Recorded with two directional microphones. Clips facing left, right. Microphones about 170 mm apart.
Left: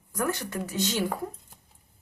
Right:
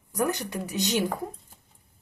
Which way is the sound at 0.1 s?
15° right (ahead or behind).